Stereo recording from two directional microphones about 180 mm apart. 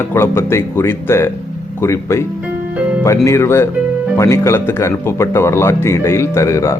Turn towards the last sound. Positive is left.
turn(degrees=15)  # may be behind; listen again after turning